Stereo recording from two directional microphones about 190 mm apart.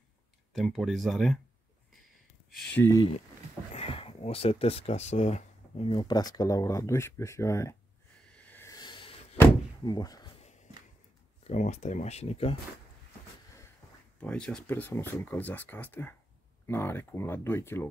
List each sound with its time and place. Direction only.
0.5 s speech: centre (ahead or behind)
2.5 s speech: 5° left (ahead or behind)
3.7 s speech: 30° left (ahead or behind)
8.3 s a sound: 10° left (ahead or behind); by 9.4 s 25° left (ahead or behind)
9.4 s door: 20° left (ahead or behind)
11.4 s speech: 40° left (ahead or behind)
14.2 s speech: 5° left (ahead or behind)